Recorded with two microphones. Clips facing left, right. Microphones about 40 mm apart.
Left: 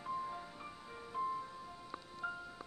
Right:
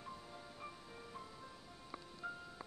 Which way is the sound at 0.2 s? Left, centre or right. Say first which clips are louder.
Left 7 dB; left.